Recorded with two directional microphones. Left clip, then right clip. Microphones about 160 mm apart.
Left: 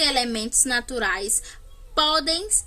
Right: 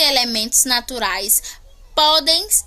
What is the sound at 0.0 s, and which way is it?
A woman's voice, 10° left (ahead or behind).